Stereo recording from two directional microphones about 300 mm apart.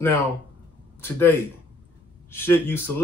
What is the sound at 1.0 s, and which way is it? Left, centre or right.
Speech, centre.